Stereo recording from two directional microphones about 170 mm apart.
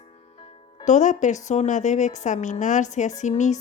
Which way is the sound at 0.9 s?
45° left (ahead or behind).